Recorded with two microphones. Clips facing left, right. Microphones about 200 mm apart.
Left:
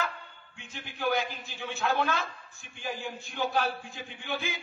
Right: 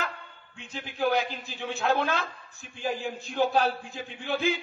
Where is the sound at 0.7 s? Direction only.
35° right (ahead or behind).